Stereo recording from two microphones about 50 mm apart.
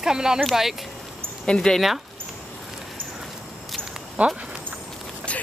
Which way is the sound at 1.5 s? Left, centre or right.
Centre.